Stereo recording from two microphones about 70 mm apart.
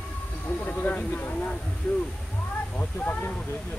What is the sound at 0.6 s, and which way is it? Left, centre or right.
Speech, left.